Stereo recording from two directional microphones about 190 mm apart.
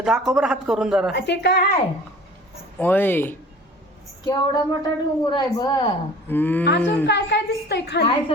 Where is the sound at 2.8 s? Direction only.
10° left (ahead or behind).